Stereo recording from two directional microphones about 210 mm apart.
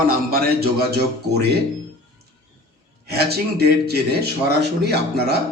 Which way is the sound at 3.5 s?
50° right (ahead or behind).